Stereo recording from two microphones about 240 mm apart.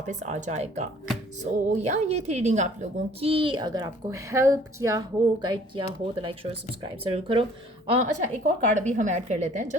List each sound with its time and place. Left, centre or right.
0.1 s a child's voice: right